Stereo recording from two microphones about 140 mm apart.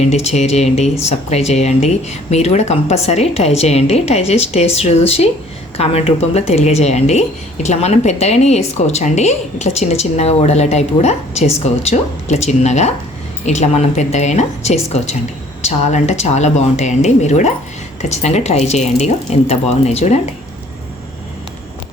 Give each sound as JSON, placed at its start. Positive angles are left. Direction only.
{"t": 0.1, "sound": "a woman's voice", "side_deg": 50}